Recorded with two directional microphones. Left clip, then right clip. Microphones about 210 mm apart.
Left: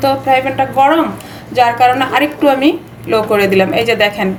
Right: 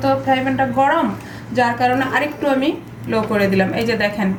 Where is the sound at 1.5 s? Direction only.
55° left (ahead or behind).